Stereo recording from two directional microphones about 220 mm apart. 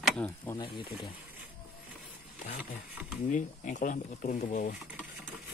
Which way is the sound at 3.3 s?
35° left (ahead or behind).